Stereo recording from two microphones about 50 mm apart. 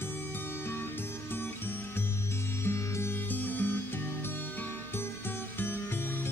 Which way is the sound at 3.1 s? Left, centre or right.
Left.